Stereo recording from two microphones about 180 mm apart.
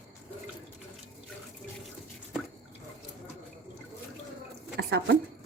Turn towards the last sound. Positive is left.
turn(degrees=-70)  # may be behind; listen again after turning